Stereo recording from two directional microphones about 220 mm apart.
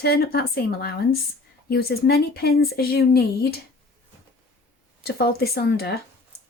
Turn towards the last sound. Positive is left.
turn(degrees=45)  # may be behind; listen again after turning